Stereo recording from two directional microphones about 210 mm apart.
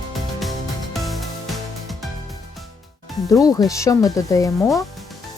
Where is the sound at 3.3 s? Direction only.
15° left (ahead or behind).